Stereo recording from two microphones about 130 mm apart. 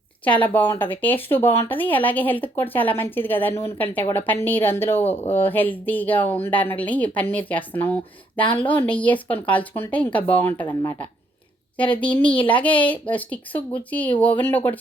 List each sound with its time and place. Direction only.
0.3 s speech: 10° left (ahead or behind)